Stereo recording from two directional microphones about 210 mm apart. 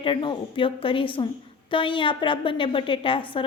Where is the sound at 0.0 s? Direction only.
25° left (ahead or behind).